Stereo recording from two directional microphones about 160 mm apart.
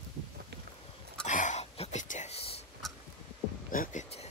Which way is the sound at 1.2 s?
50° left (ahead or behind).